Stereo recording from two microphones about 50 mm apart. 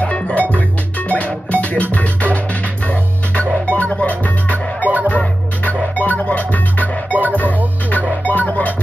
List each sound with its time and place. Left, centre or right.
0.0 s music: left
3.7 s music: left
7.1 s music: right
7.3 s music: left